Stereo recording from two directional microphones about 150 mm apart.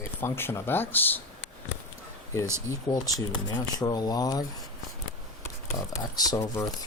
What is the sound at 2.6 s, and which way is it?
Speech, 25° left (ahead or behind).